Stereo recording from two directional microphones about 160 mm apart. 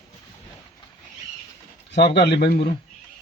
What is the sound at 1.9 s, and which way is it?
Speech, 90° left.